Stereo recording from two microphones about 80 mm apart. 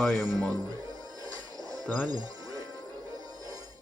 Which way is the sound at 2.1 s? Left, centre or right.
Right.